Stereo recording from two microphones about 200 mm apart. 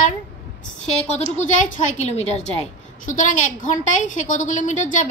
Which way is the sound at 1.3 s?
40° left (ahead or behind).